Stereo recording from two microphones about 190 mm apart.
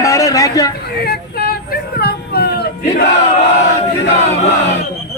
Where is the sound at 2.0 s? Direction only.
55° left (ahead or behind).